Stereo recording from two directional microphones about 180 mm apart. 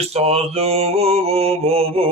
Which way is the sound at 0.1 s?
35° right (ahead or behind).